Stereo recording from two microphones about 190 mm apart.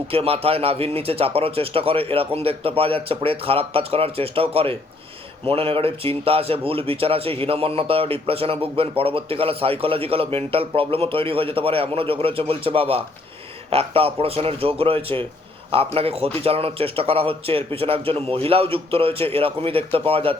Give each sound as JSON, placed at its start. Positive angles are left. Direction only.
{"t": 0.1, "sound": "a man's voice", "side_deg": -30}